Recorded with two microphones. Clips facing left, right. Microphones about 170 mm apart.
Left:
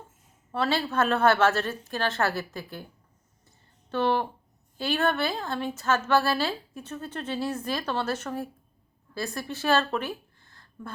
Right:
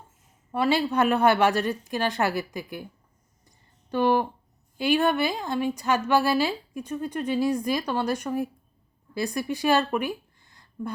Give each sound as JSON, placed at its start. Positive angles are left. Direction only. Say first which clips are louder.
{"t": 0.5, "sound": "a woman's voice", "louder": "right 3 dB", "side_deg": -15}
{"t": 3.9, "sound": "a sound", "louder": "right 3 dB", "side_deg": -15}
{"t": 4.8, "sound": "a woman's voice", "louder": "right 4 dB", "side_deg": -15}